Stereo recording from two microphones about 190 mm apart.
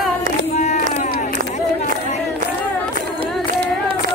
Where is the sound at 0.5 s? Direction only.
35° left (ahead or behind).